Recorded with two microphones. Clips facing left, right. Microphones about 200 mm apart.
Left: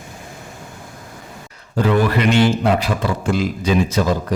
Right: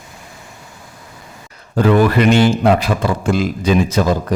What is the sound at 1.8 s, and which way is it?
Speech, 50° right (ahead or behind).